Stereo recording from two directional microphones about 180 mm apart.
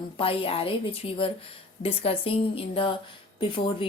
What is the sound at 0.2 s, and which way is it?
A woman's voice, 30° left (ahead or behind).